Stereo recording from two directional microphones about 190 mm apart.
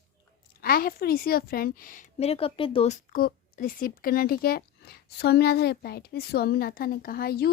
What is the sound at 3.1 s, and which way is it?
Speech, 50° left (ahead or behind).